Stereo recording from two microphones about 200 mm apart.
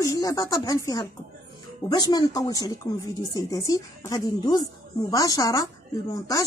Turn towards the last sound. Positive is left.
turn(degrees=15)  # may be behind; listen again after turning